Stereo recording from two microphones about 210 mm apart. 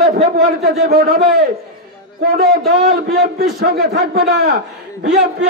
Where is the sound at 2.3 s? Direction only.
45° right (ahead or behind).